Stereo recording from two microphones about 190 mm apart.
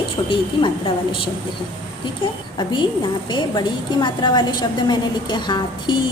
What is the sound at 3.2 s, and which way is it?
A woman's voice, 25° left (ahead or behind).